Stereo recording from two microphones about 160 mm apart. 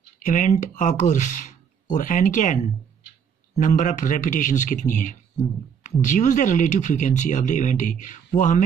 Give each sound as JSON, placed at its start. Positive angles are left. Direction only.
{"t": 0.2, "sound": "speech", "side_deg": 50}